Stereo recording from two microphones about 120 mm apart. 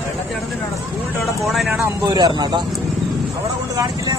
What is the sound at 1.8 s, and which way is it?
Speech, 30° right (ahead or behind).